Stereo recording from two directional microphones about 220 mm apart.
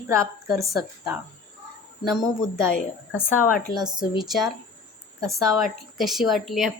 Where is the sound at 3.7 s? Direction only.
20° right (ahead or behind).